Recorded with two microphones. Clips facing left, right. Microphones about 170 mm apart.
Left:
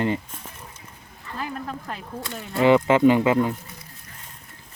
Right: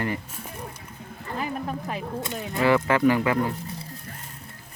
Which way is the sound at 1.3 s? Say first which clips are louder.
Right 2 dB; 10° right (ahead or behind).